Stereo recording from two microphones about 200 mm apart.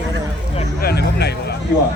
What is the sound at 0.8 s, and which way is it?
Speech, 50° left (ahead or behind).